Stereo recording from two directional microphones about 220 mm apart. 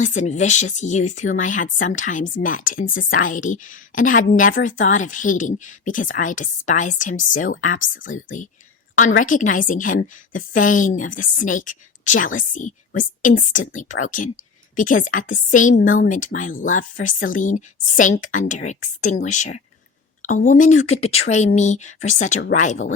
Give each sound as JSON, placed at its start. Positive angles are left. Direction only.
{"t": 0.0, "sound": "a woman's voice", "side_deg": 35}